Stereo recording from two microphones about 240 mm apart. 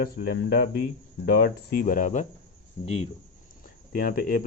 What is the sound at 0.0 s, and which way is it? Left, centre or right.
Speech, left.